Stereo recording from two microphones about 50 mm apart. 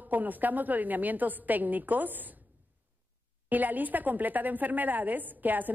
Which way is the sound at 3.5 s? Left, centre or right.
Right.